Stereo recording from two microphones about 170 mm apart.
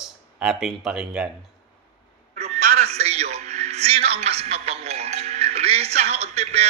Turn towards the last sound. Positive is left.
turn(degrees=-40)  # may be behind; listen again after turning